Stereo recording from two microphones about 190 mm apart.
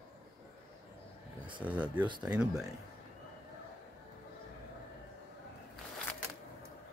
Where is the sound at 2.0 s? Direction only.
25° right (ahead or behind).